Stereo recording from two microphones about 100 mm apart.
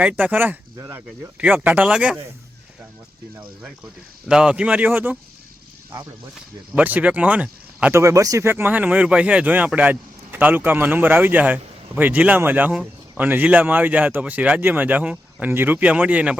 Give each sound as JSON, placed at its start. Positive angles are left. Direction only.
{"t": 0.0, "sound": "speech", "side_deg": -15}
{"t": 4.3, "sound": "speech", "side_deg": -10}
{"t": 6.7, "sound": "speech", "side_deg": -15}
{"t": 7.9, "sound": "speech", "side_deg": -30}